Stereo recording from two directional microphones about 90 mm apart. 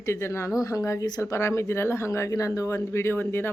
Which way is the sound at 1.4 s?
30° left (ahead or behind).